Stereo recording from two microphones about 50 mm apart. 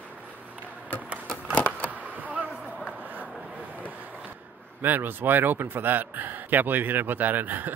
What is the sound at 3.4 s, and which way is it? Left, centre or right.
Vehicle, right.